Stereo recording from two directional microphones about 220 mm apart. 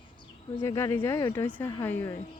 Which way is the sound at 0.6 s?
10° left (ahead or behind).